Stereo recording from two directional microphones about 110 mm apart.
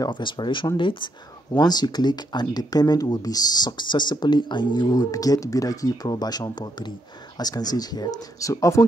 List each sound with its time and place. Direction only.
0.0 s speech: 45° left (ahead or behind); by 8.8 s 30° left (ahead or behind)